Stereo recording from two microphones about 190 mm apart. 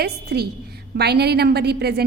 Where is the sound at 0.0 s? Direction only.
55° right (ahead or behind).